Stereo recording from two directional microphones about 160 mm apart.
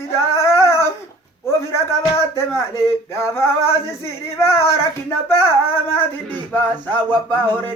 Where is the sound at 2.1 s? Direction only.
15° left (ahead or behind).